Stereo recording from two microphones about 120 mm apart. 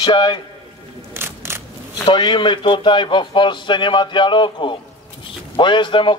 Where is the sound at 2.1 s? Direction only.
40° left (ahead or behind).